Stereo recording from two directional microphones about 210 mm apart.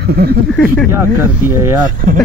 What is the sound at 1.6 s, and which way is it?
Speech, 15° right (ahead or behind).